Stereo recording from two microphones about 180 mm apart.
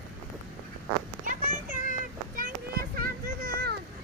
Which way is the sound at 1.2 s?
50° right (ahead or behind).